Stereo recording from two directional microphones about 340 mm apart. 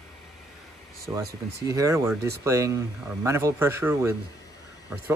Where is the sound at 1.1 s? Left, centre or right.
Centre.